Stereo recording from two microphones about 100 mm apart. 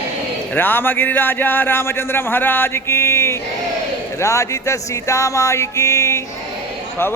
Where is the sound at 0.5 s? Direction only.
20° left (ahead or behind).